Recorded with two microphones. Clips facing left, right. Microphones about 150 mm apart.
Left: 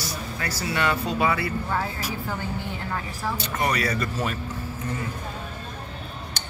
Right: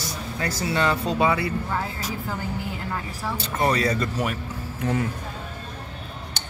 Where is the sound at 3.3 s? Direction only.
25° right (ahead or behind).